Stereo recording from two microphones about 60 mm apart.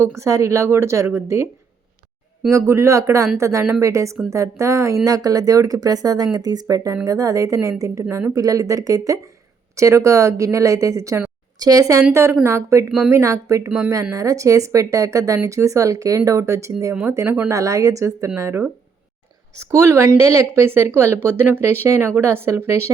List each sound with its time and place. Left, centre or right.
0.2 s speech: right
2.5 s speech: right
5.0 s speech: right
9.7 s speech: right
11.6 s speech: right
12.1 s a woman's voice: right
13.7 s speech: centre
14.0 s a woman's voice: right
17.5 s speech: right
19.5 s a woman's voice: right